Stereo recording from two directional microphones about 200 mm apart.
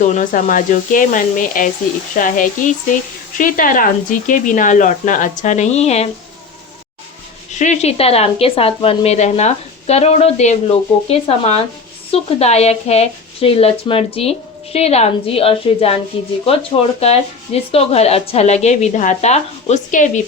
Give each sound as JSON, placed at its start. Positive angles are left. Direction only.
{"t": 0.0, "sound": "speech", "side_deg": 40}
{"t": 7.5, "sound": "speech", "side_deg": 35}
{"t": 17.0, "sound": "speech", "side_deg": 30}